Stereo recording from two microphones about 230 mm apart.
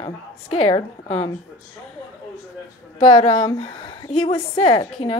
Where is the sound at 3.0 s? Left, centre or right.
Left.